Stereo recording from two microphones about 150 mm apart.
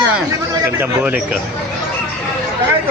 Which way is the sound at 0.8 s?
10° right (ahead or behind).